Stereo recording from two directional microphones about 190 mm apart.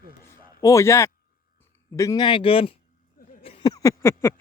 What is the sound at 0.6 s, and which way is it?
Speech, 15° left (ahead or behind).